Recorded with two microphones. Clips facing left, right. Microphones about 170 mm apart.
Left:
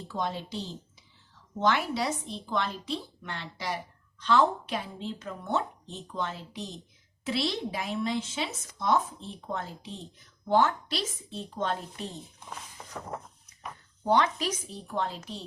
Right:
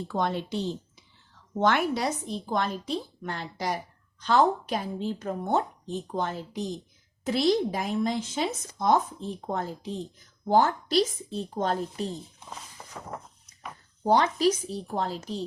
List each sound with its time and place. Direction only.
0.1 s a woman's voice: 60° right (ahead or behind); by 12.0 s 40° right (ahead or behind)
12.7 s a sound: centre (ahead or behind)
14.0 s a woman's voice: 35° right (ahead or behind)